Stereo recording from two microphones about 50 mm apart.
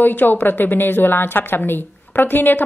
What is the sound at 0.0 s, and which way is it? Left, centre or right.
A woman's voice, left.